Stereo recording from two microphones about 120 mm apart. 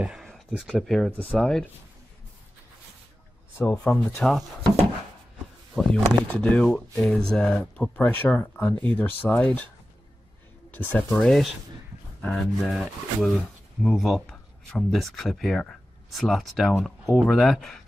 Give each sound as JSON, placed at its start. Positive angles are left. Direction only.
{"t": 0.0, "sound": "a sound", "side_deg": 0}
{"t": 0.7, "sound": "speech", "side_deg": 5}
{"t": 3.9, "sound": "speech", "side_deg": 20}
{"t": 4.2, "sound": "speech", "side_deg": 5}
{"t": 10.7, "sound": "speech", "side_deg": 15}
{"t": 11.1, "sound": "speech", "side_deg": 0}